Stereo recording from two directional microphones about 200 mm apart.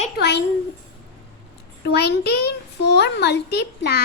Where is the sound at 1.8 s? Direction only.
55° left (ahead or behind).